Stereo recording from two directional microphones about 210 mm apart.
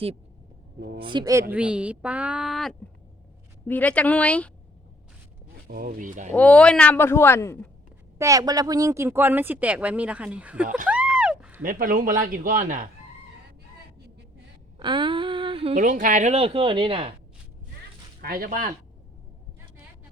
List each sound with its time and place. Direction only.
0.9 s a man's voice: 20° right (ahead or behind); by 4.5 s 5° left (ahead or behind)
5.6 s a man's voice: 45° right (ahead or behind)
6.3 s a man's voice: 5° left (ahead or behind)
8.2 s speech: 15° right (ahead or behind)
10.8 s a sound: 5° right (ahead or behind)
11.6 s a man's voice: 40° right (ahead or behind)
14.8 s speech: 25° right (ahead or behind)
18.2 s speech: 45° right (ahead or behind)